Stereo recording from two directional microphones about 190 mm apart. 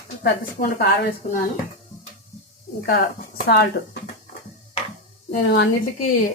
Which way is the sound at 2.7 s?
50° left (ahead or behind).